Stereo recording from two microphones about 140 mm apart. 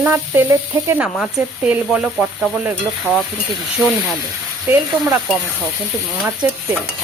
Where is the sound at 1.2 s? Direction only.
Centre (ahead or behind).